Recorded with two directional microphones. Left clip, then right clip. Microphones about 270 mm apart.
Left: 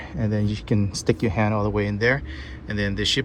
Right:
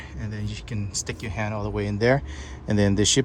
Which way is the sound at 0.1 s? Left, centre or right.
Centre.